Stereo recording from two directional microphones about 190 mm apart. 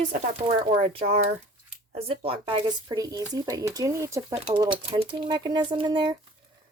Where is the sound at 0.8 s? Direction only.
35° right (ahead or behind).